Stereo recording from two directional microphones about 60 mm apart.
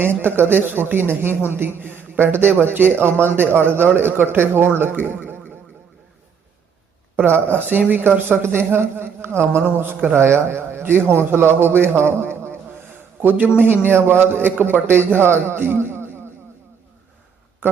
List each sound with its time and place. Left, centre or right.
0.0 s a man's voice: right
4.8 s a sound: right
7.2 s a man's voice: right
17.6 s speech: right